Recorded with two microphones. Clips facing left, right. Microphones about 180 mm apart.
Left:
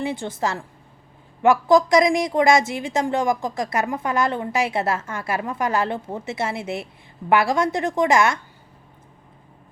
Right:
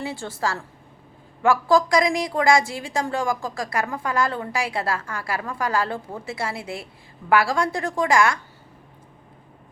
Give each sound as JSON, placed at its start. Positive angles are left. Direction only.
{"t": 0.0, "sound": "a woman's voice", "side_deg": 20}